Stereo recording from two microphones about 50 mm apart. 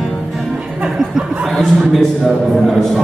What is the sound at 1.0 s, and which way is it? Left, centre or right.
Chuckle, centre.